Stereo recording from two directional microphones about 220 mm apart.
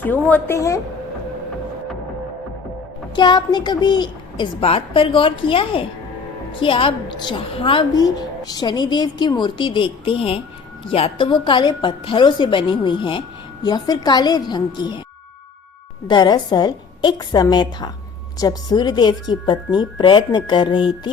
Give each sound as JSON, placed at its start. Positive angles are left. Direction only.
{"t": 0.0, "sound": "a woman's voice", "side_deg": 5}
{"t": 3.2, "sound": "a woman's voice", "side_deg": 20}
{"t": 16.0, "sound": "a woman's voice", "side_deg": 20}